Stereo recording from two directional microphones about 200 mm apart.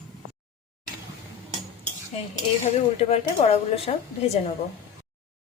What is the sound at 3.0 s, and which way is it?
Speech, 30° left (ahead or behind).